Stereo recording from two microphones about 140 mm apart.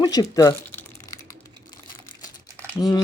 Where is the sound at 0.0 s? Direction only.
25° left (ahead or behind).